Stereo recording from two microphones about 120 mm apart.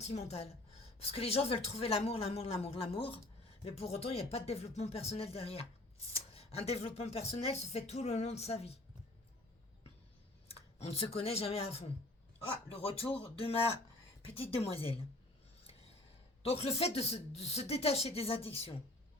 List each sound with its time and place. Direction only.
0.0 s speech: 65° left (ahead or behind)
10.5 s speech: 55° left (ahead or behind)
12.5 s speech: 45° left (ahead or behind)
16.4 s speech: 60° left (ahead or behind)